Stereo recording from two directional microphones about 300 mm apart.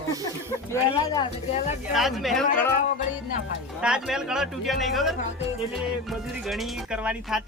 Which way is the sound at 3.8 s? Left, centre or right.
Centre.